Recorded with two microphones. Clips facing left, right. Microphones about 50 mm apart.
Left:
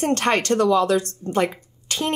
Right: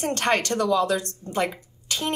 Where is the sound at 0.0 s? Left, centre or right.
Left.